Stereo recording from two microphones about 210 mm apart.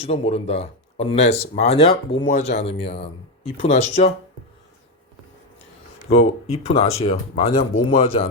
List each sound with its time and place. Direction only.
0.0 s speech: 30° left (ahead or behind)
6.0 s speech: 30° left (ahead or behind)